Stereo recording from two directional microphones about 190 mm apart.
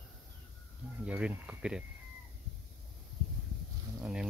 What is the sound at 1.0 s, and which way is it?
Speech, 5° right (ahead or behind).